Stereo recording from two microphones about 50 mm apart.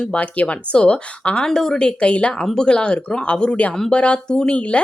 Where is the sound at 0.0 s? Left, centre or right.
Left.